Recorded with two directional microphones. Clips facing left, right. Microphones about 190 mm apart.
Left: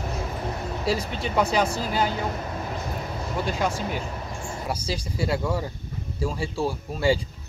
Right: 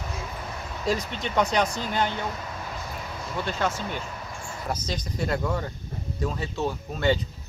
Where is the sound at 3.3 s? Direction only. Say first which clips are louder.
Left 1 dB; 10° left (ahead or behind).